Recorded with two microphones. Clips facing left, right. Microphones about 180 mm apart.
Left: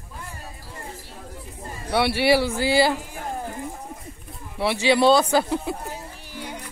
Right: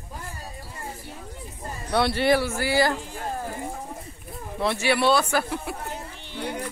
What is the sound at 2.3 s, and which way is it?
Speech, 15° left (ahead or behind).